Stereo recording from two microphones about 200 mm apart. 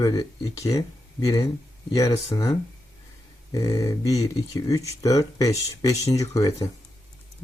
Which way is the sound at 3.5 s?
20° left (ahead or behind).